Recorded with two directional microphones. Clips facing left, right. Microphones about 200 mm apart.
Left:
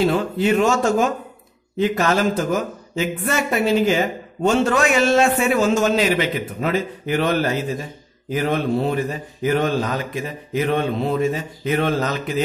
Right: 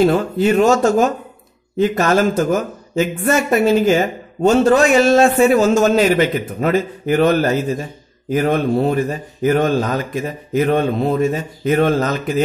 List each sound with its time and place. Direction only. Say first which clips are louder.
0.0 s speech: right 4 dB; 45° right (ahead or behind)